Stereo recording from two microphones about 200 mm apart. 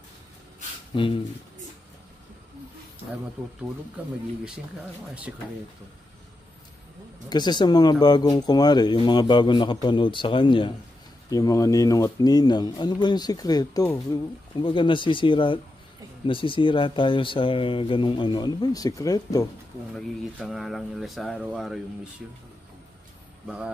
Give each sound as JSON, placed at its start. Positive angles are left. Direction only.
{"t": 0.9, "sound": "speech", "side_deg": 25}
{"t": 7.2, "sound": "speech", "side_deg": 20}
{"t": 20.0, "sound": "speech", "side_deg": 0}
{"t": 23.4, "sound": "speech", "side_deg": -5}